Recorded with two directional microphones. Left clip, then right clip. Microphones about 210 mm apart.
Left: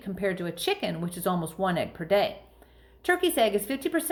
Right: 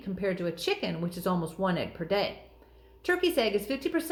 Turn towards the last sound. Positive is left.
turn(degrees=30)  # may be behind; listen again after turning